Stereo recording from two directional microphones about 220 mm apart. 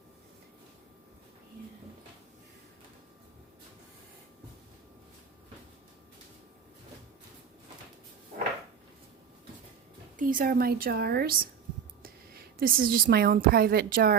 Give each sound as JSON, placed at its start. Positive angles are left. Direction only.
{"t": 10.2, "sound": "a woman's voice", "side_deg": -40}